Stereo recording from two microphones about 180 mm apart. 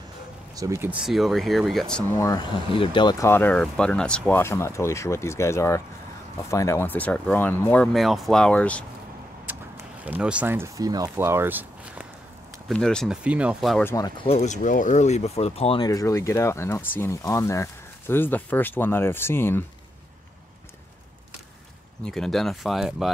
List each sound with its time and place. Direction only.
0.6 s speech: 15° right (ahead or behind); by 2.0 s 5° left (ahead or behind)
2.1 s speech: 20° left (ahead or behind)
2.7 s speech: 30° left (ahead or behind); by 8.8 s 5° left (ahead or behind)
9.5 s speech: 10° right (ahead or behind)
12.6 s speech: 5° left (ahead or behind)
13.8 s speech: 20° left (ahead or behind)
15.9 s speech: 20° left (ahead or behind)
22.0 s speech: centre (ahead or behind)